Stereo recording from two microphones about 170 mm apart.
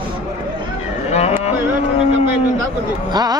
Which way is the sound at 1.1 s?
40° left (ahead or behind).